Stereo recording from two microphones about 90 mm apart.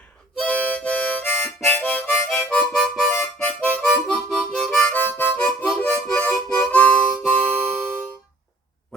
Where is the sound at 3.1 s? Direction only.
15° left (ahead or behind).